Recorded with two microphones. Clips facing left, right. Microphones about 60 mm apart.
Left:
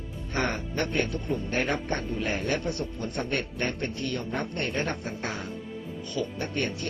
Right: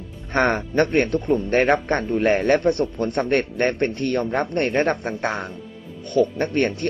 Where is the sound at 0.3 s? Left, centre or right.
Right.